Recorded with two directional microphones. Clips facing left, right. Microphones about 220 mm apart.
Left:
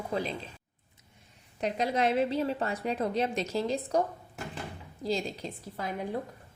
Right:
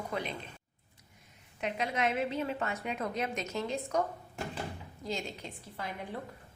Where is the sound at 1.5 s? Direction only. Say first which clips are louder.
Left 5 dB; 35° left (ahead or behind).